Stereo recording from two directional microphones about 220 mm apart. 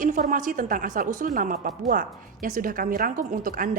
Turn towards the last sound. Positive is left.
turn(degrees=-40)  # may be behind; listen again after turning